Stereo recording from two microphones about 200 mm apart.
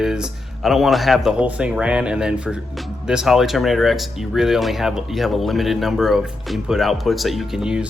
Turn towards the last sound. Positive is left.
turn(degrees=-5)  # may be behind; listen again after turning